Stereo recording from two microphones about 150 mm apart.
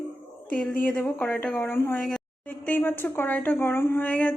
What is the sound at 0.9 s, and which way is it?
A woman's voice, 10° left (ahead or behind).